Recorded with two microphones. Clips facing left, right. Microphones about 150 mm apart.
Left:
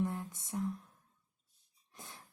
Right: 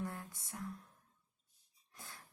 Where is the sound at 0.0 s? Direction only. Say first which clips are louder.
Left 7 dB; 20° left (ahead or behind).